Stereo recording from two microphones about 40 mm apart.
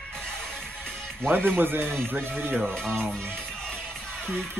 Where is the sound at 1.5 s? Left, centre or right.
Right.